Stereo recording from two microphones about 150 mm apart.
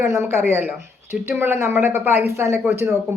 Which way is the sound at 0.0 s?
20° right (ahead or behind).